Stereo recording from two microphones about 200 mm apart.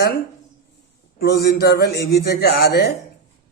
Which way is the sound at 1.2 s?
50° left (ahead or behind).